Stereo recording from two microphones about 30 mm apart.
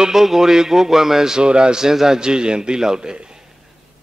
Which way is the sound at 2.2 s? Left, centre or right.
Right.